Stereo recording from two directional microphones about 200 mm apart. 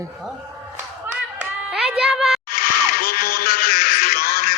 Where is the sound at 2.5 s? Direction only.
45° left (ahead or behind).